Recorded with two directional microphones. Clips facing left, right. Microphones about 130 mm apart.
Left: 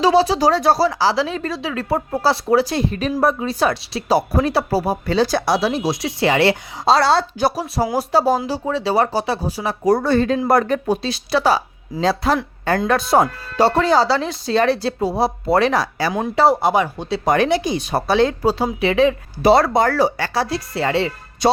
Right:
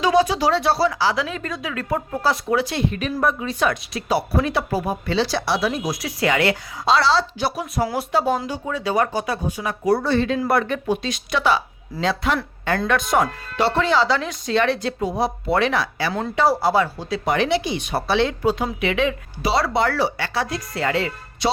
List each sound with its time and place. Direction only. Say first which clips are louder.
0.0 s speech: left 3 dB; 35° left (ahead or behind)
5.5 s speech: left 4 dB; 30° left (ahead or behind)
7.0 s speech: left 3 dB; 50° left (ahead or behind)
16.5 s speech: left 2 dB; 20° left (ahead or behind)
17.2 s speech: left 4 dB; 45° left (ahead or behind)
19.4 s speech: left 6 dB; 55° left (ahead or behind); by 21.1 s 30° left (ahead or behind)
21.4 s music: left 5 dB; 45° left (ahead or behind)